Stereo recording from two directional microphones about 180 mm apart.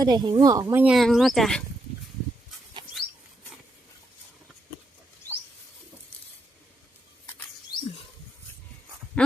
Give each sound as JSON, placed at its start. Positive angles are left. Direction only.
{"t": 0.0, "sound": "speech", "side_deg": -25}
{"t": 0.9, "sound": "speech", "side_deg": 0}
{"t": 9.2, "sound": "speech", "side_deg": 5}